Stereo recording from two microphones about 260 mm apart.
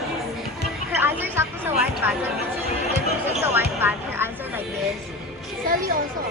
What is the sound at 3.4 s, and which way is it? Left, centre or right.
Basketball bounce, centre.